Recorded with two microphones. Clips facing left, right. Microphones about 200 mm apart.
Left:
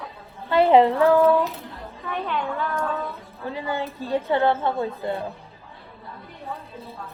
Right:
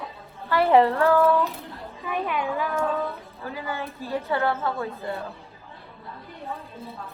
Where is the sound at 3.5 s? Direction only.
25° left (ahead or behind).